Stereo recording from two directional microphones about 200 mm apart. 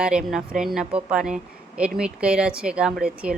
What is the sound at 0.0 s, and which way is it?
Speech, 5° right (ahead or behind).